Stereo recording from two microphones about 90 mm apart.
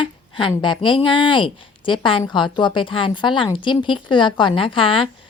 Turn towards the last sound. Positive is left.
turn(degrees=75)  # may be behind; listen again after turning